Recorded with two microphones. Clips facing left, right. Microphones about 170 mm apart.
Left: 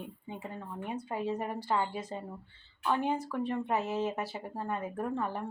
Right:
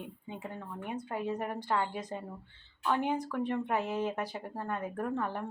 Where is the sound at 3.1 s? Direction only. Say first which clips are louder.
Even; 5° left (ahead or behind).